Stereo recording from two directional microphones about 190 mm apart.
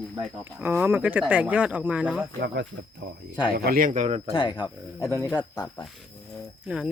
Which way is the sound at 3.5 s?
50° right (ahead or behind).